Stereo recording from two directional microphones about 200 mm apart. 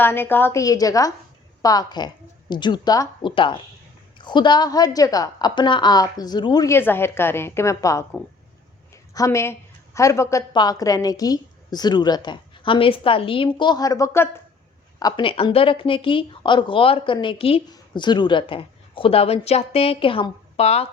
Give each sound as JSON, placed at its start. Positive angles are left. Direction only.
{"t": 0.0, "sound": "a woman's voice", "side_deg": 10}